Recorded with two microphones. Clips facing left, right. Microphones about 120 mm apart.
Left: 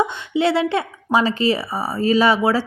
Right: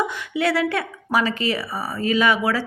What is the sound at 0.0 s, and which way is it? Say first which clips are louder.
Speech: left 4 dB; 25° left (ahead or behind).